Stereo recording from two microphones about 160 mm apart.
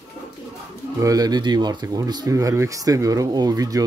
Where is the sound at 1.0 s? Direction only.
25° right (ahead or behind).